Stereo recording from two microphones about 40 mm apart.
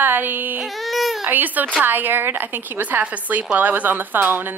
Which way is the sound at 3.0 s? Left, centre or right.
Right.